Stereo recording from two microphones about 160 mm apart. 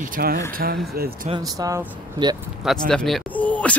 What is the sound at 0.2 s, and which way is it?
Speech, 75° right (ahead or behind).